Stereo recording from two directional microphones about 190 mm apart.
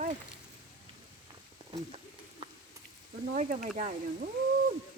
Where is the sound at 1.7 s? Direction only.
30° right (ahead or behind).